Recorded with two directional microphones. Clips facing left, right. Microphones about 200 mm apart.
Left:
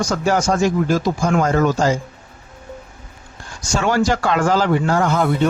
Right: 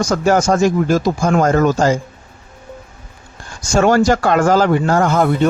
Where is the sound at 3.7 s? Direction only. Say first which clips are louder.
Right 5 dB; 45° right (ahead or behind).